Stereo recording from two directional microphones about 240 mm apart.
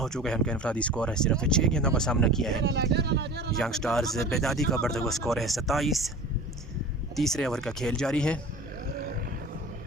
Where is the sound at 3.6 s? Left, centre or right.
Centre.